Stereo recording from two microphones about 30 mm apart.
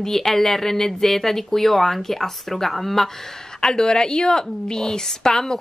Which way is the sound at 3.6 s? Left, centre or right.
Left.